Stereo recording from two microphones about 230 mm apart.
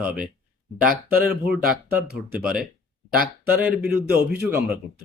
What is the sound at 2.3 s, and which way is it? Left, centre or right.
Speech, centre.